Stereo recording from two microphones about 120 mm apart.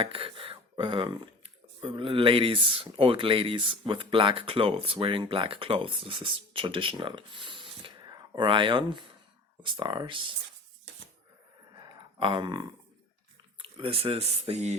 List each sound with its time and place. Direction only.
0.0 s speech: 50° right (ahead or behind)
11.8 s a sound: 40° right (ahead or behind)
13.6 s speech: 50° right (ahead or behind)